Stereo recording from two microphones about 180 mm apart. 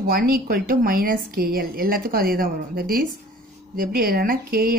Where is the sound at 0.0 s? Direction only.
55° right (ahead or behind).